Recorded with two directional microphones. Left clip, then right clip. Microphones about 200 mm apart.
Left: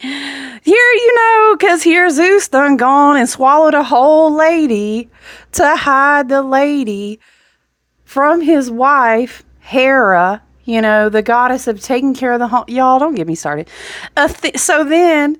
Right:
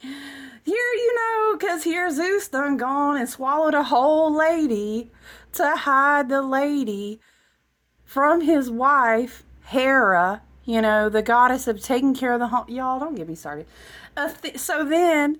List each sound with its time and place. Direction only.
0.0 s a sound: 35° left (ahead or behind)
3.5 s a woman's voice: 30° left (ahead or behind)
6.8 s speech: 60° left (ahead or behind)
8.1 s a woman's voice: 20° left (ahead or behind)
12.7 s speech: 35° left (ahead or behind)
14.8 s a woman's voice: 25° left (ahead or behind)